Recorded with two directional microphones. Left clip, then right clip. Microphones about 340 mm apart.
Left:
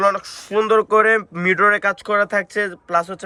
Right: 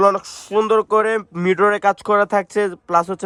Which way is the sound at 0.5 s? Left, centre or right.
Centre.